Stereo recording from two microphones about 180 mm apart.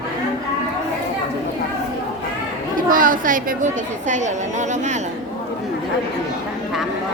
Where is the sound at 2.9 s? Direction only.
50° right (ahead or behind).